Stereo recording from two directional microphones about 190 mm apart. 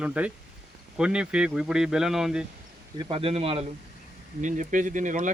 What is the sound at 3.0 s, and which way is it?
Speech, 30° right (ahead or behind).